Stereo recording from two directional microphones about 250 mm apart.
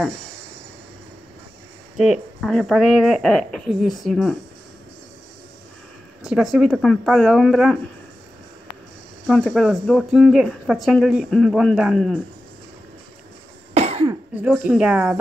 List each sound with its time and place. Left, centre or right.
0.0 s a sound: centre
2.0 s speech: centre
6.2 s speech: centre
9.3 s speech: centre
13.7 s cough: right
14.3 s speech: centre